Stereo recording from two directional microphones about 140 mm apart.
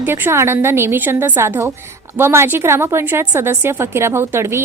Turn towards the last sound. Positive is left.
turn(degrees=-20)  # may be behind; listen again after turning